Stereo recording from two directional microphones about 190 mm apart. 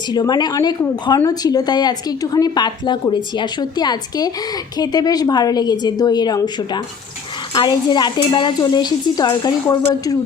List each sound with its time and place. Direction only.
0.1 s a woman's voice: 20° left (ahead or behind)